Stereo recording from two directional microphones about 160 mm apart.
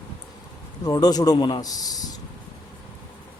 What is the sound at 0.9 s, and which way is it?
A man's voice, 25° left (ahead or behind).